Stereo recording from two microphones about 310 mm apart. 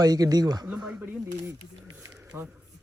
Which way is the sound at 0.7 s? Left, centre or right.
Centre.